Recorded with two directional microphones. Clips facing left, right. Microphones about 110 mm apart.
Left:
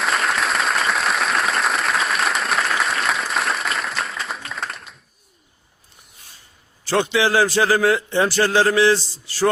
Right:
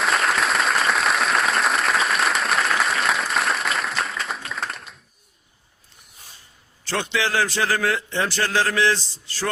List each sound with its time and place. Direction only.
0.0 s applause: centre (ahead or behind)
6.8 s a man's voice: 15° left (ahead or behind)